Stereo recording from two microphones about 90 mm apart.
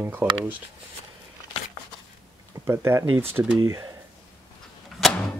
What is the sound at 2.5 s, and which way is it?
Speech, 30° right (ahead or behind).